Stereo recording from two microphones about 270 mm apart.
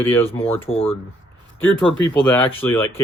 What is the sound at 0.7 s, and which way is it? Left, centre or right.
Speech, left.